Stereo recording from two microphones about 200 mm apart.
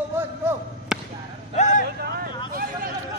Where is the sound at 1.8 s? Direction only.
55° right (ahead or behind).